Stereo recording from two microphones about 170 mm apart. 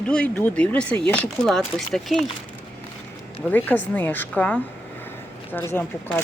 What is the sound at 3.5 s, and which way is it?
Speech, 10° left (ahead or behind).